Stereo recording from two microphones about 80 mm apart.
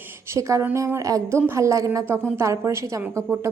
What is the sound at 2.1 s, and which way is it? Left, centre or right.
A woman's voice, right.